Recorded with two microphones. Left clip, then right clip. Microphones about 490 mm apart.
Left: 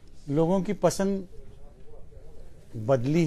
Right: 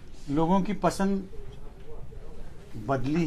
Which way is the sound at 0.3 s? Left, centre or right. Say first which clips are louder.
Left 1 dB; left.